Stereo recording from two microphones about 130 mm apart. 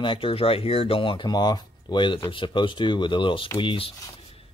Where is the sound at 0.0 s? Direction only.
40° left (ahead or behind).